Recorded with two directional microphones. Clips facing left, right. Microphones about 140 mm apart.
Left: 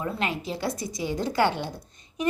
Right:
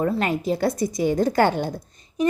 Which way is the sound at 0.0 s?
45° right (ahead or behind).